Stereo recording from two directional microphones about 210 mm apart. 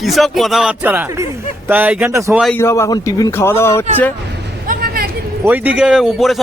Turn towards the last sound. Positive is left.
turn(degrees=0)  # may be behind; listen again after turning